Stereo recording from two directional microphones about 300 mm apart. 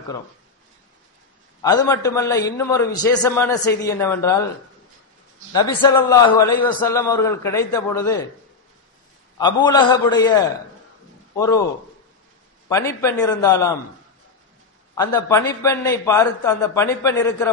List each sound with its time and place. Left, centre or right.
1.6 s a man's voice: centre
5.5 s a man's voice: centre
9.4 s a man's voice: centre
12.6 s a man's voice: centre
15.0 s a man's voice: centre